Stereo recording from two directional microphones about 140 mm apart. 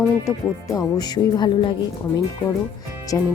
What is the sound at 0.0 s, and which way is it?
Speech, 25° left (ahead or behind).